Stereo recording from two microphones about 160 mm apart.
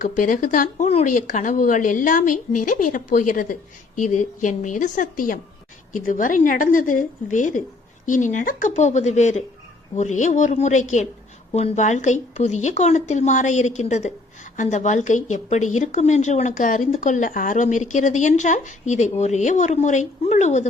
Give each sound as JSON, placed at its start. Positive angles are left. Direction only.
{"t": 0.0, "sound": "a woman's voice", "side_deg": 55}